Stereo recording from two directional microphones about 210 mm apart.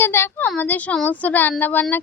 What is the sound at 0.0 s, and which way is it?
Speech, 10° left (ahead or behind).